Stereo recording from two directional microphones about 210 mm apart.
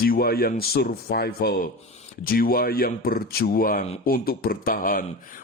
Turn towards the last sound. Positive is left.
turn(degrees=40)  # may be behind; listen again after turning